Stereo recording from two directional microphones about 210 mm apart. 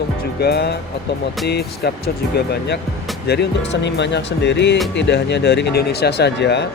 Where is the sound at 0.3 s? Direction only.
50° left (ahead or behind).